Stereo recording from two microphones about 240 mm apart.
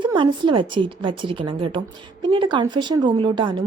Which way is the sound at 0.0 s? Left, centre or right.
Centre.